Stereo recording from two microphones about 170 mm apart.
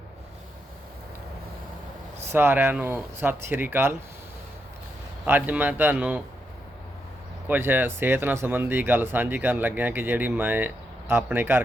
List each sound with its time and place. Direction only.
2.3 s speech: 15° right (ahead or behind)
5.2 s speech: 10° right (ahead or behind)
7.4 s speech: 10° right (ahead or behind)